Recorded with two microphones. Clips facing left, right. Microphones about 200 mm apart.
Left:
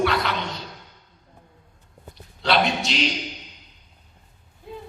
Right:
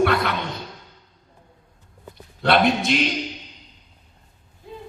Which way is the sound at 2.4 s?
55° right (ahead or behind).